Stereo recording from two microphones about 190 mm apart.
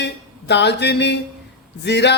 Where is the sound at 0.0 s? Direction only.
65° left (ahead or behind).